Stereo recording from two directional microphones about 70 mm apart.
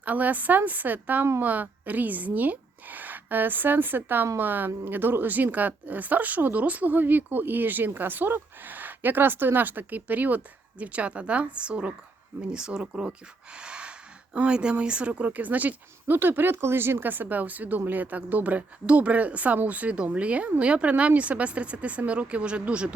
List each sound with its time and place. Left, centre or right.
0.0 s speech: right
13.6 s a sound: centre
14.3 s speech: centre